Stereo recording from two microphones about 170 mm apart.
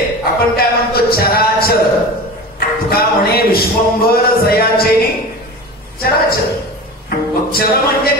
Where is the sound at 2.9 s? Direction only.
65° left (ahead or behind).